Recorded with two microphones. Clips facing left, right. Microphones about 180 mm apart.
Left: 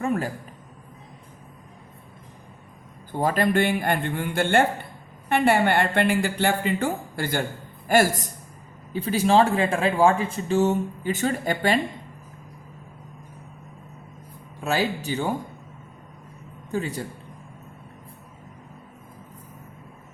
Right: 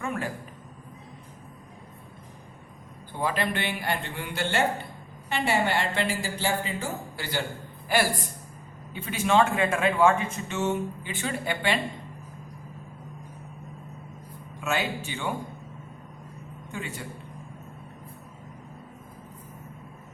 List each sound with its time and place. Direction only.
0.0 s a sound: 35° left (ahead or behind)
3.1 s a man's voice: 45° left (ahead or behind)
14.6 s speech: 35° left (ahead or behind)
16.7 s speech: 40° left (ahead or behind)